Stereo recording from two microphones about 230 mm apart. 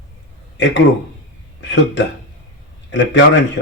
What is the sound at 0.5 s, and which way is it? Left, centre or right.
A man's voice, left.